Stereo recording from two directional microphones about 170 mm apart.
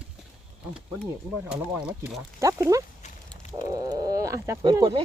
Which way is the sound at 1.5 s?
5° right (ahead or behind).